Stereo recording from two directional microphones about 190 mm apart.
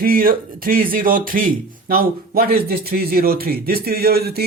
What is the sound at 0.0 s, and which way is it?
Speech, 50° right (ahead or behind).